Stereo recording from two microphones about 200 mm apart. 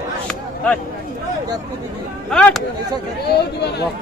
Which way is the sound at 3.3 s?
55° left (ahead or behind).